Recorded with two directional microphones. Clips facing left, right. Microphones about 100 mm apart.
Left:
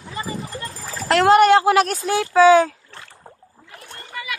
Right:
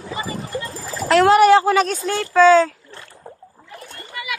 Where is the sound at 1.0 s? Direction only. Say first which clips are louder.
Right 1 dB; centre (ahead or behind); by 2.7 s 15° left (ahead or behind).